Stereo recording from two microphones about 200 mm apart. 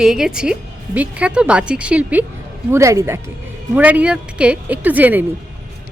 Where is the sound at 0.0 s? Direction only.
5° right (ahead or behind).